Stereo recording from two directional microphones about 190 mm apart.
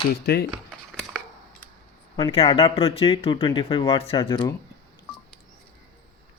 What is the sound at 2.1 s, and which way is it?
Speech, 30° left (ahead or behind).